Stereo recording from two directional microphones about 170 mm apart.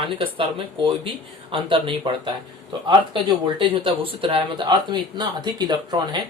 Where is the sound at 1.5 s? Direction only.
30° right (ahead or behind).